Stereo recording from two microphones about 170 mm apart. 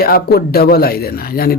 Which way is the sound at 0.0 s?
60° left (ahead or behind).